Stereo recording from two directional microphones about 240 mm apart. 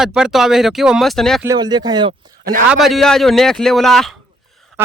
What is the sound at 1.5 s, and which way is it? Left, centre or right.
Speech, centre.